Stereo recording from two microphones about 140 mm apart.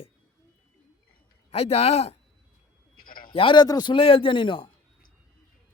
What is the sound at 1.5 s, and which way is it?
Speech, 50° left (ahead or behind).